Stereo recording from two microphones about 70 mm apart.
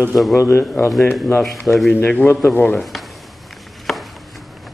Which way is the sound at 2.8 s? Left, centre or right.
Centre.